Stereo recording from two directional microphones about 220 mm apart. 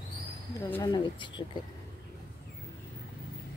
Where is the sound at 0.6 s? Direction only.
15° left (ahead or behind).